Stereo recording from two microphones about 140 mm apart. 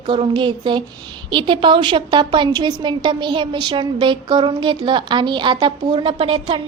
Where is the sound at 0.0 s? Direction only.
35° right (ahead or behind).